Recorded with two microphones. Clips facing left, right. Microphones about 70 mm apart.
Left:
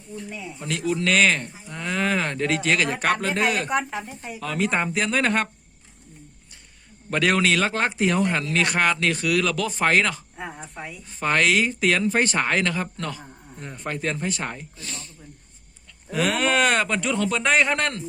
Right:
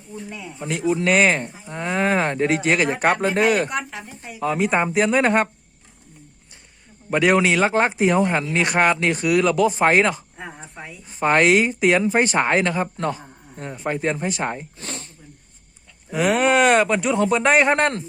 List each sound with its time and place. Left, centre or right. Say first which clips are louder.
0.2 s cattle: right 3 dB; right
3.8 s speech: left 3 dB; left
4.4 s cattle: right 5 dB; right
7.1 s cattle: right 4 dB; centre
14.8 s speech: right 4 dB; right
16.1 s speech: right 4 dB; centre